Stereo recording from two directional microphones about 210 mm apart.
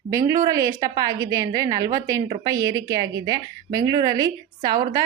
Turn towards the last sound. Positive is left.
turn(degrees=-20)  # may be behind; listen again after turning